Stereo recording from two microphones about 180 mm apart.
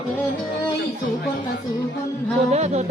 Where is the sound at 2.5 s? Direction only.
40° right (ahead or behind).